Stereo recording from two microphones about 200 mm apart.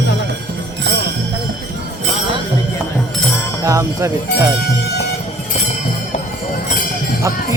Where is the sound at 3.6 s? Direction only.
15° right (ahead or behind).